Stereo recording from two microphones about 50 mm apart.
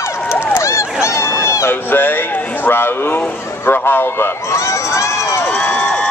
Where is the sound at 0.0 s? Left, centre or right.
Left.